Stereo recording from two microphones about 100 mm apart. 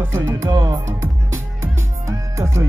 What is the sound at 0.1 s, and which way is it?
Music, 25° right (ahead or behind).